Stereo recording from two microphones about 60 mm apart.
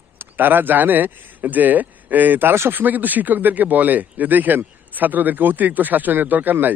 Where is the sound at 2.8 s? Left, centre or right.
Right.